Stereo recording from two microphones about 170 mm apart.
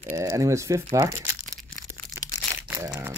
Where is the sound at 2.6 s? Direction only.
10° right (ahead or behind).